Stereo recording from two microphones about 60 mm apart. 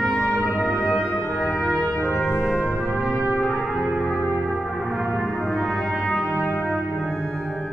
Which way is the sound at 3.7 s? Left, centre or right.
Centre.